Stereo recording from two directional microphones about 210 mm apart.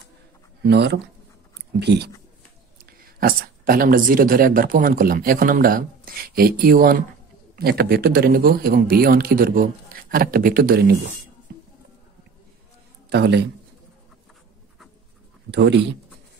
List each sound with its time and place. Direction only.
0.6 s speech: 55° right (ahead or behind)
2.8 s speech: 45° right (ahead or behind)
13.1 s speech: 55° right (ahead or behind)
15.5 s speech: 55° right (ahead or behind)